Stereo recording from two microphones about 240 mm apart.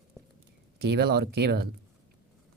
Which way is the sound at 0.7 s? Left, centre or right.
Right.